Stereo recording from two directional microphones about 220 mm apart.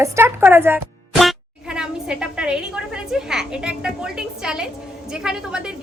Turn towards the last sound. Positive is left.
turn(degrees=-5)  # may be behind; listen again after turning